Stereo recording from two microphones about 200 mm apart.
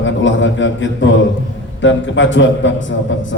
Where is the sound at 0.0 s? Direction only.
70° left (ahead or behind).